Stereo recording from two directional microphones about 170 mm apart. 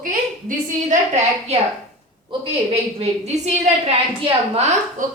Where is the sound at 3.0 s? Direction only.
40° right (ahead or behind).